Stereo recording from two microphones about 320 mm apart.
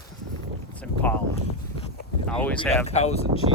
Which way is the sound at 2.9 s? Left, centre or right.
Centre.